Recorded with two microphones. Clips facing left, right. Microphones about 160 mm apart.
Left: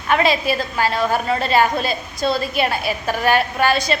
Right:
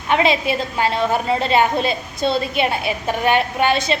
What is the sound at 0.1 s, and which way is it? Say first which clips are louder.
A woman's voice: even; 20° right (ahead or behind).